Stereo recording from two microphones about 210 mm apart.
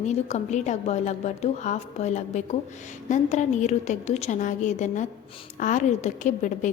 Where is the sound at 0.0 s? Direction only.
35° left (ahead or behind).